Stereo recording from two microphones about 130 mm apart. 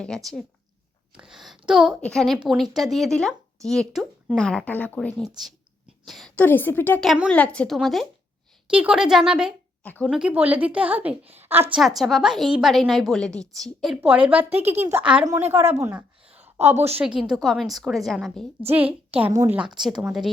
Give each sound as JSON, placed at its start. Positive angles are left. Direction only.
{"t": 0.0, "sound": "a woman's voice", "side_deg": 5}
{"t": 6.3, "sound": "a woman's voice", "side_deg": 15}
{"t": 7.0, "sound": "a woman's voice", "side_deg": 0}
{"t": 9.8, "sound": "speech", "side_deg": 10}
{"t": 10.1, "sound": "a woman's voice", "side_deg": -5}
{"t": 11.7, "sound": "a woman's voice", "side_deg": 0}
{"t": 14.1, "sound": "a woman's voice", "side_deg": -10}
{"t": 16.3, "sound": "a sound", "side_deg": -15}
{"t": 16.8, "sound": "a woman's voice", "side_deg": -10}
{"t": 18.6, "sound": "a woman's voice", "side_deg": -45}
{"t": 19.7, "sound": "a woman's voice", "side_deg": -5}